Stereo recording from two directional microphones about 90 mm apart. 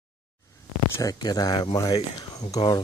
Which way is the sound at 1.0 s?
45° left (ahead or behind).